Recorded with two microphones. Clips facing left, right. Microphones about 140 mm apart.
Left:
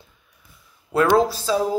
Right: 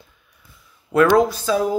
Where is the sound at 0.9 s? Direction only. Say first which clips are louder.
Right 3 dB; 30° left (ahead or behind).